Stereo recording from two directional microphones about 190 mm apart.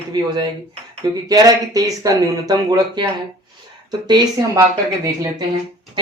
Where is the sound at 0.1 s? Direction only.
20° right (ahead or behind).